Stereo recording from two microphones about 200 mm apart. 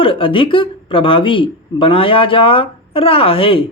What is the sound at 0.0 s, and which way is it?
Speech, 25° left (ahead or behind).